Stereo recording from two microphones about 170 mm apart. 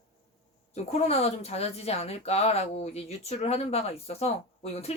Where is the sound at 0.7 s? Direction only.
35° left (ahead or behind).